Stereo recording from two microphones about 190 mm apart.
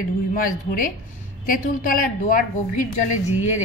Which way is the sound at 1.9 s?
45° left (ahead or behind).